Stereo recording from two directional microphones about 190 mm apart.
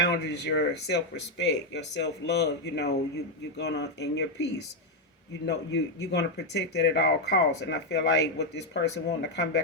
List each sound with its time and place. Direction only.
0.0 s speech: 65° left (ahead or behind)